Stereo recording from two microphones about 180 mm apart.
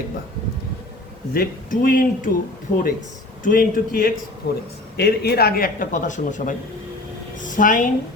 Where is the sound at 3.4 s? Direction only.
50° left (ahead or behind).